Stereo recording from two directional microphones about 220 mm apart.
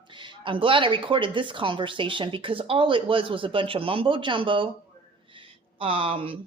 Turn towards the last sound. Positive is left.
turn(degrees=-25)  # may be behind; listen again after turning